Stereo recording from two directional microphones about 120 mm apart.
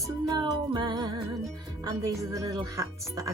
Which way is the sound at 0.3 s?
35° right (ahead or behind).